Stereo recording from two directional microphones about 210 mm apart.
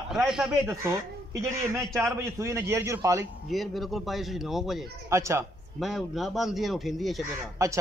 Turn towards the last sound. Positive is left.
turn(degrees=-15)  # may be behind; listen again after turning